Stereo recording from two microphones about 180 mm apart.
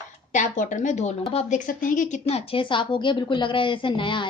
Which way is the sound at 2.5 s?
30° left (ahead or behind).